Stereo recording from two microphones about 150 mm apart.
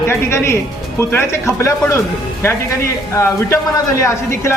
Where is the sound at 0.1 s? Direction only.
15° left (ahead or behind).